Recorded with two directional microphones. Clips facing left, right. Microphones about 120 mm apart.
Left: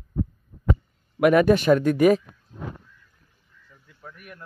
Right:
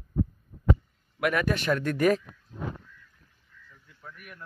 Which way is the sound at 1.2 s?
20° left (ahead or behind).